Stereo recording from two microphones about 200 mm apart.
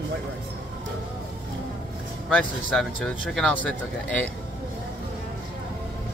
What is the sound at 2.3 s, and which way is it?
Speech, 5° left (ahead or behind).